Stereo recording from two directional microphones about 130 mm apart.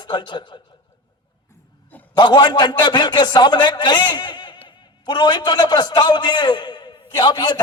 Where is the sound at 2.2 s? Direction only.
35° left (ahead or behind).